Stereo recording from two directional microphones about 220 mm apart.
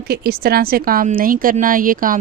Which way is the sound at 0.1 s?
45° right (ahead or behind).